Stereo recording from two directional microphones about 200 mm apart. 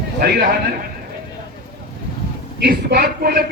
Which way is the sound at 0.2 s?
55° right (ahead or behind).